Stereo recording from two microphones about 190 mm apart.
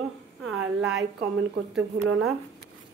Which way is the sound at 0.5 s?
70° right (ahead or behind).